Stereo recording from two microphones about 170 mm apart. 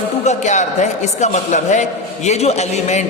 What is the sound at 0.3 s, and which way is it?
A man's voice, 45° left (ahead or behind).